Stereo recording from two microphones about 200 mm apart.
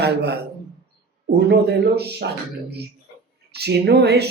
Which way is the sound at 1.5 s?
55° right (ahead or behind).